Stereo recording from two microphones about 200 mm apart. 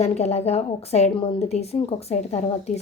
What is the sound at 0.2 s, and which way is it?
Speech, 30° left (ahead or behind).